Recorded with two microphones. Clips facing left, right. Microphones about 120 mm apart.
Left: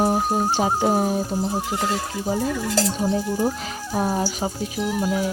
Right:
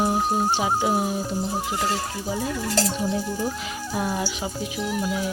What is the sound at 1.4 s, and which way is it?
Speech, centre (ahead or behind).